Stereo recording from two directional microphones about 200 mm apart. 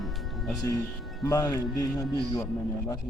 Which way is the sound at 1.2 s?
15° left (ahead or behind).